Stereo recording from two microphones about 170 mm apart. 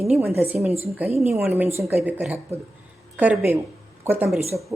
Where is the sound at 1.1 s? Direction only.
35° left (ahead or behind).